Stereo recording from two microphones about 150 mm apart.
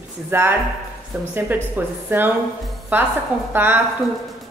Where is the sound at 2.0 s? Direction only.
15° right (ahead or behind).